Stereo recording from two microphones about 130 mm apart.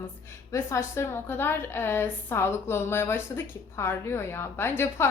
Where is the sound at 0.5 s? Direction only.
20° left (ahead or behind).